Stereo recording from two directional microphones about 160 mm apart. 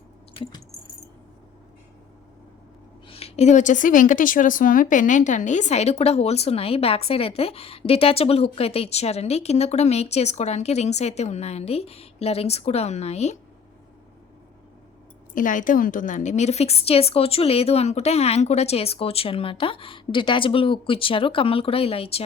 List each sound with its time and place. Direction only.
3.1 s speech: 40° left (ahead or behind)
15.3 s speech: 55° left (ahead or behind); by 22.2 s 40° left (ahead or behind)